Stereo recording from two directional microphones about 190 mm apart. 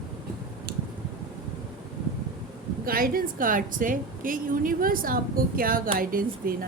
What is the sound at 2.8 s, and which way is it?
A woman's voice, 50° right (ahead or behind).